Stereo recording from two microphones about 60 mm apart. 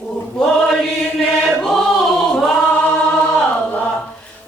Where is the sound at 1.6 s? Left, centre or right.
Centre.